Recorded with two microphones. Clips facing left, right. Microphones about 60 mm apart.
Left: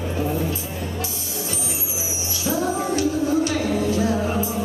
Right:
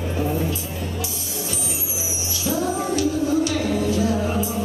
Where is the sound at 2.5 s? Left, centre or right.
Left.